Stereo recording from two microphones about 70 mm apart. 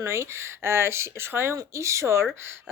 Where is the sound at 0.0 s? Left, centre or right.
Right.